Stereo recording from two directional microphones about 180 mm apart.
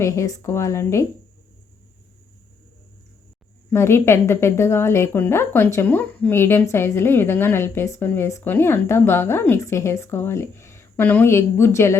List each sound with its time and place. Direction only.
0.0 s a woman's voice: 15° left (ahead or behind)
3.7 s a woman's voice: 15° left (ahead or behind)